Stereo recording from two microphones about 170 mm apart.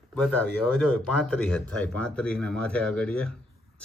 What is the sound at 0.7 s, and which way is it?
Speech, 5° left (ahead or behind).